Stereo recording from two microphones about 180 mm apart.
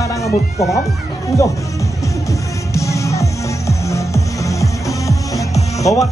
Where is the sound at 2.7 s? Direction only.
15° left (ahead or behind).